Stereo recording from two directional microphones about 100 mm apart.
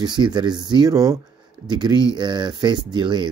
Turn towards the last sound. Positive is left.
turn(degrees=-50)  # may be behind; listen again after turning